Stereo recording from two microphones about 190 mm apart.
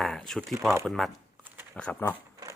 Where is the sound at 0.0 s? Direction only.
Centre (ahead or behind).